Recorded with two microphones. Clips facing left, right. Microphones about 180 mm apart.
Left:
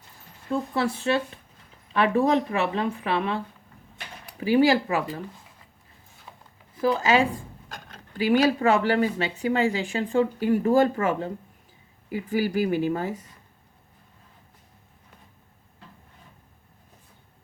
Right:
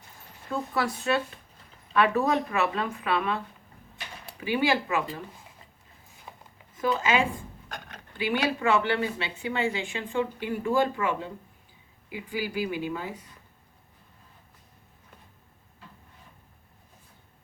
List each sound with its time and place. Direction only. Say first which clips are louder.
0.7 s a woman's voice: left 1 dB; 25° left (ahead or behind)
6.3 s a sound: right 1 dB; 15° right (ahead or behind)
6.7 s a woman's voice: left 4 dB; 35° left (ahead or behind)